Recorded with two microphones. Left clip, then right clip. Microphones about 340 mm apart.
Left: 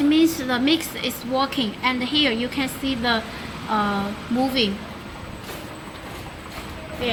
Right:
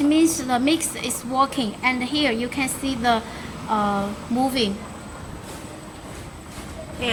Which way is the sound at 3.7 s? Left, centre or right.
Centre.